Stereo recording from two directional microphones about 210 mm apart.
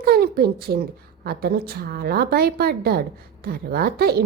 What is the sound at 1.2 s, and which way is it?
A woman's voice, 45° right (ahead or behind).